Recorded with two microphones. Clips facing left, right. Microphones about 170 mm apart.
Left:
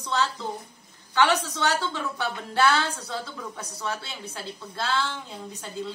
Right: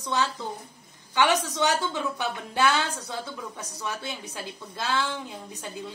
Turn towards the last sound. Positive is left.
turn(degrees=-15)  # may be behind; listen again after turning